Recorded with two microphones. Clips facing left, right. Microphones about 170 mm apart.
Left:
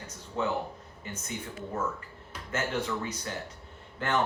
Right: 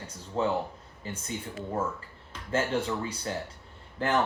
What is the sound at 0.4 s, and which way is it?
Speech, 30° right (ahead or behind).